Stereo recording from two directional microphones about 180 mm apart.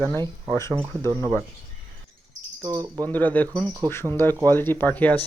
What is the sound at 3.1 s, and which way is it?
Speech, 10° left (ahead or behind).